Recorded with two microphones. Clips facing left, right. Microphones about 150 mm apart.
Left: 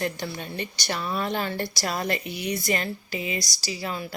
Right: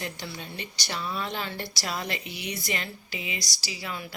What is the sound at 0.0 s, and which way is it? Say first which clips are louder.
A woman's voice: left 7 dB; 55° left (ahead or behind).